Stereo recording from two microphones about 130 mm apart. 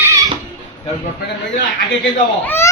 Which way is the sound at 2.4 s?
15° left (ahead or behind).